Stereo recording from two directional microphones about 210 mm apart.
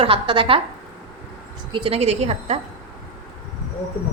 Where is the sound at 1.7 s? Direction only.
25° right (ahead or behind).